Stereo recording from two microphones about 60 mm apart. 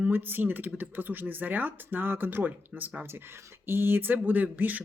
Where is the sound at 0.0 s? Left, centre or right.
Right.